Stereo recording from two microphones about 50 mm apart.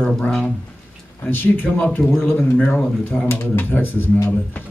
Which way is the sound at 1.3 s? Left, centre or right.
Left.